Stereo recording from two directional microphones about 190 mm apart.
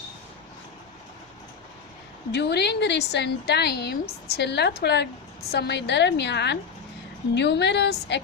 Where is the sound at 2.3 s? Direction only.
60° left (ahead or behind).